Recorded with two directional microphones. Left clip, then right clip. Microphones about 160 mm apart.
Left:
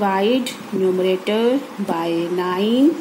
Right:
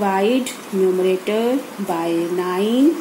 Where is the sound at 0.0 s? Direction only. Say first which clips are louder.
Even; 5° left (ahead or behind).